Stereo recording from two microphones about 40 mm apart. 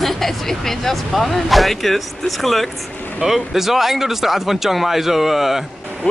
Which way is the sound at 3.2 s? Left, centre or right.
Centre.